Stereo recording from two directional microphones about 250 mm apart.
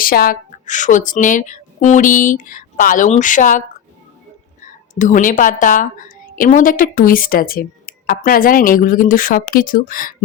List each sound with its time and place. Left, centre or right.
0.0 s speech: left
4.6 s speech: left